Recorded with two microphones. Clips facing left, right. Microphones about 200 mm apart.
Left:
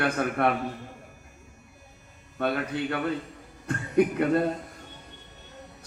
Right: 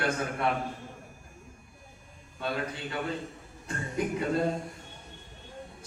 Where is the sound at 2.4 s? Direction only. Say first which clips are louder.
Left 6 dB; 60° left (ahead or behind).